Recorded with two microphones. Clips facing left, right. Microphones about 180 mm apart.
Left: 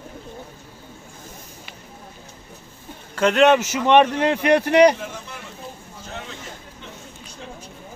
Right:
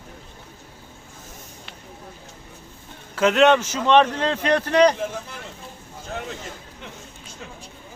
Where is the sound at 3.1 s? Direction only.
Centre (ahead or behind).